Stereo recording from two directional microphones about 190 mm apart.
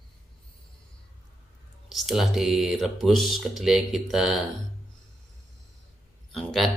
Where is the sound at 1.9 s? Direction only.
Centre (ahead or behind).